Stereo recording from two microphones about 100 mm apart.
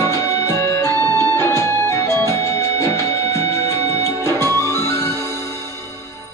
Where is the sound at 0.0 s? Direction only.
30° left (ahead or behind).